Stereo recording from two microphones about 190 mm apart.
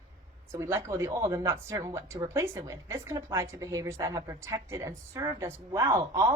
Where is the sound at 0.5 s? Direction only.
15° right (ahead or behind).